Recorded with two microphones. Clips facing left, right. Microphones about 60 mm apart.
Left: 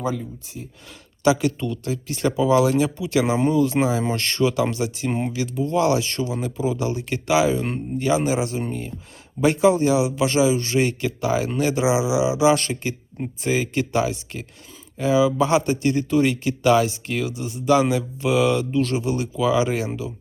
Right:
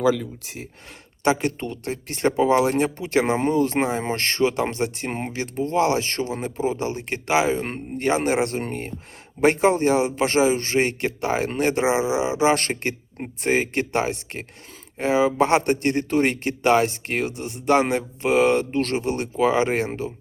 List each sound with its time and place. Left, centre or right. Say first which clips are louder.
0.0 s speech: right 6 dB; right
1.2 s speech: left 2 dB; right
7.9 s a man's voice: even; right